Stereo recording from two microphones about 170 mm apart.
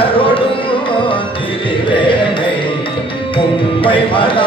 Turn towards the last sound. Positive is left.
turn(degrees=30)  # may be behind; listen again after turning